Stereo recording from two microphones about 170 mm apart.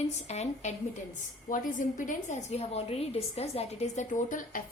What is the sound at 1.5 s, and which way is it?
A woman's voice, 50° left (ahead or behind).